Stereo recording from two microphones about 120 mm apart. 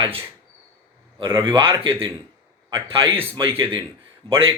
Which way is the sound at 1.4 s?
45° right (ahead or behind).